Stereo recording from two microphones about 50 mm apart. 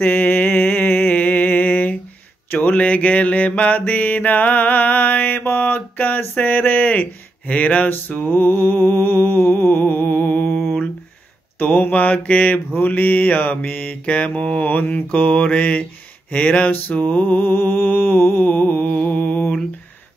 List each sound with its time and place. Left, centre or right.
0.0 s music: left
2.6 s mantra: left
5.4 s a sound: left
6.3 s speech: left
7.9 s mantra: left
11.9 s speech: left
12.8 s mantra: left
15.1 s speech: left
16.9 s mantra: left